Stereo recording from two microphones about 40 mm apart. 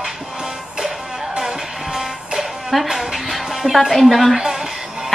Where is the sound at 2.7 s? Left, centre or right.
Centre.